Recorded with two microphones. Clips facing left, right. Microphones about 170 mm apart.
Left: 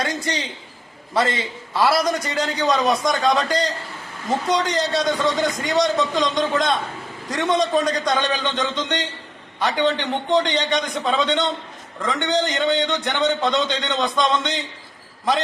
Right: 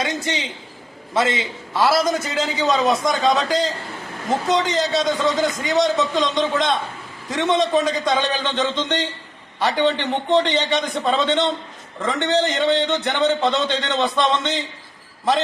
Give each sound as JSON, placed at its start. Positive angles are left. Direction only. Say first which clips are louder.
{"t": 0.1, "sound": "a man's voice", "louder": "right 1 dB", "side_deg": -25}
{"t": 1.1, "sound": "a man's voice", "louder": "right 1 dB", "side_deg": 0}